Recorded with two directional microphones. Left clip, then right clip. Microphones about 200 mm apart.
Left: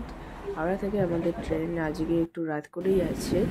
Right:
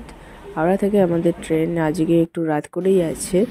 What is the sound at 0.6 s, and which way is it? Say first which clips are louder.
Speech: right 11 dB; 40° right (ahead or behind).